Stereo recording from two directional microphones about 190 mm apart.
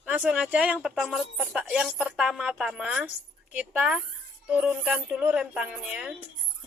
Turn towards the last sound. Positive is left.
turn(degrees=-5)  # may be behind; listen again after turning